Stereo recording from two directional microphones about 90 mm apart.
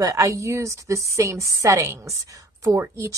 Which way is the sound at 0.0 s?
35° right (ahead or behind).